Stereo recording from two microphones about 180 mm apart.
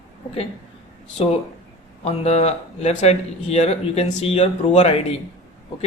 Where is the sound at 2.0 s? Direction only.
35° left (ahead or behind).